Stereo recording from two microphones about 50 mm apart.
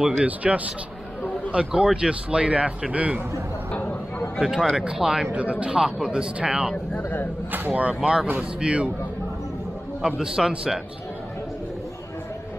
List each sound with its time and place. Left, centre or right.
0.2 s speech: right
4.4 s speech: centre
5.3 s speech: right
5.8 s speech: centre
7.0 s a sound: left
7.5 s speech: right
10.0 s speech: centre